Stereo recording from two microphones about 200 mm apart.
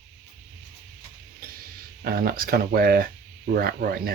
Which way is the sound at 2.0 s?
45° right (ahead or behind).